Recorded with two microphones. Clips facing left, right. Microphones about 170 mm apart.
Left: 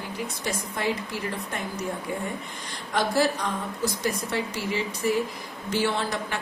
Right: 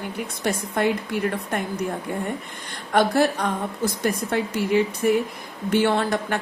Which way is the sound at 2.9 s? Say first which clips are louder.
Right 5 dB; 55° right (ahead or behind).